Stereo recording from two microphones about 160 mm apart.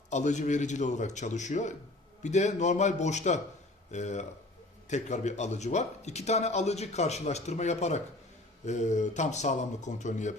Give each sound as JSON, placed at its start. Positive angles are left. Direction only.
{"t": 0.1, "sound": "a man's voice", "side_deg": 50}